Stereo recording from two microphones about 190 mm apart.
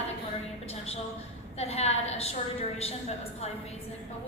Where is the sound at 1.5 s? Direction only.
30° left (ahead or behind).